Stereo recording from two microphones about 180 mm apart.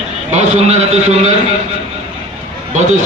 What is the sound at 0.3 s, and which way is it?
Speech, 40° right (ahead or behind).